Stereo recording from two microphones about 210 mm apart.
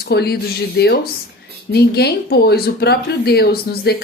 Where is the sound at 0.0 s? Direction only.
50° left (ahead or behind).